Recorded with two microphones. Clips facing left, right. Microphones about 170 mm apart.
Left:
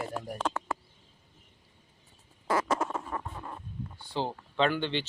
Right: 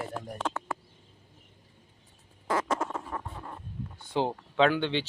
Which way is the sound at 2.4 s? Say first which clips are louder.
Left 1 dB; 10° left (ahead or behind).